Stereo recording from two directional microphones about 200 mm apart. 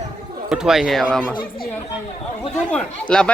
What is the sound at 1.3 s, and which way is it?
Speech, 45° left (ahead or behind).